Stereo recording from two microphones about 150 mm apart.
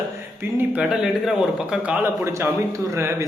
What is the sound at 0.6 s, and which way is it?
A man's voice, 10° right (ahead or behind).